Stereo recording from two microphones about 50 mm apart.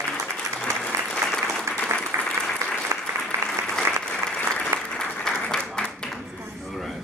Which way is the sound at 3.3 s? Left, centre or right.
Right.